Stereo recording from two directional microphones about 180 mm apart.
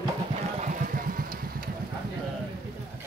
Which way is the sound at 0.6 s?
45° right (ahead or behind).